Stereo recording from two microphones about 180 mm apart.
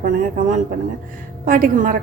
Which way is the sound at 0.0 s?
45° right (ahead or behind).